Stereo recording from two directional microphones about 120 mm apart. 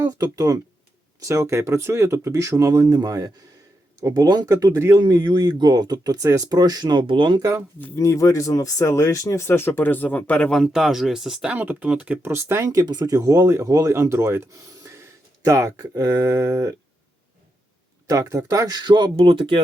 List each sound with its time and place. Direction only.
0.0 s speech: 25° right (ahead or behind)
7.8 s speech: 20° left (ahead or behind); by 16.7 s 25° right (ahead or behind)
18.1 s speech: 25° right (ahead or behind); by 19.6 s 45° right (ahead or behind)